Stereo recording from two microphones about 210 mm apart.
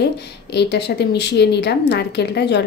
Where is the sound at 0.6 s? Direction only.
50° left (ahead or behind).